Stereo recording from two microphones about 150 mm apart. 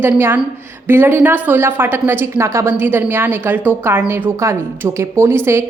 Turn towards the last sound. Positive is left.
turn(degrees=-15)  # may be behind; listen again after turning